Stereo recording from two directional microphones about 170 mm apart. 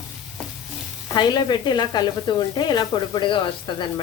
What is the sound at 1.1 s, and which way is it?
Speech, 25° left (ahead or behind).